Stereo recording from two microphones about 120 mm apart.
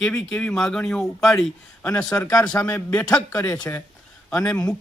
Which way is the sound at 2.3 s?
30° left (ahead or behind).